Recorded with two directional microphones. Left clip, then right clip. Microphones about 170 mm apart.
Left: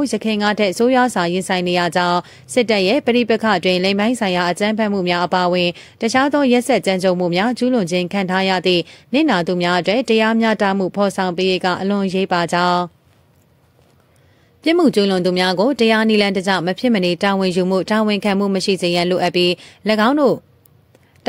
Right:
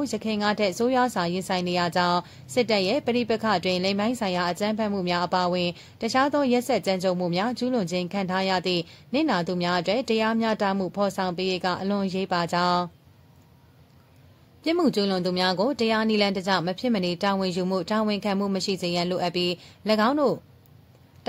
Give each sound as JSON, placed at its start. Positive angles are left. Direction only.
{"t": 0.0, "sound": "speech", "side_deg": 25}
{"t": 14.6, "sound": "speech", "side_deg": 30}